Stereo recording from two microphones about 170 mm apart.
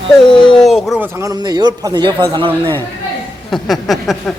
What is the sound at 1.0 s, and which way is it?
A man's voice, 20° right (ahead or behind).